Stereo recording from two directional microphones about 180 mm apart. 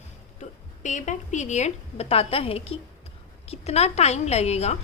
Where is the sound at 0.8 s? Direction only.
40° left (ahead or behind).